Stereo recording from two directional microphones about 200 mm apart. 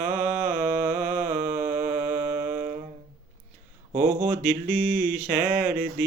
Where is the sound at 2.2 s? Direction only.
40° right (ahead or behind).